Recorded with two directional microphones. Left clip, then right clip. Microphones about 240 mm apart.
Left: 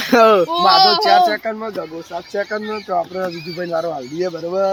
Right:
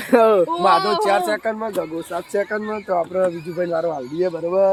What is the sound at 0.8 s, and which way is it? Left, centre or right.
Speech, left.